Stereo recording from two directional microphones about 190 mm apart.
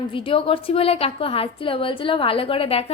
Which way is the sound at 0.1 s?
30° left (ahead or behind).